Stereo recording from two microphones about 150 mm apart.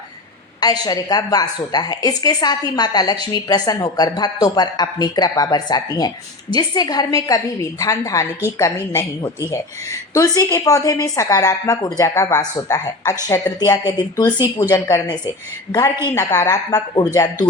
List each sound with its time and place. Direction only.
0.6 s a woman's voice: 25° left (ahead or behind)
16.1 s speech: 20° left (ahead or behind)